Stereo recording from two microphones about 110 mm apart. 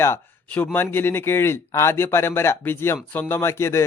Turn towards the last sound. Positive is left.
turn(degrees=25)  # may be behind; listen again after turning